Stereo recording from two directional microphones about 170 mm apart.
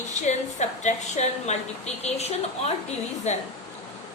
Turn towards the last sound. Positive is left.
turn(degrees=40)  # may be behind; listen again after turning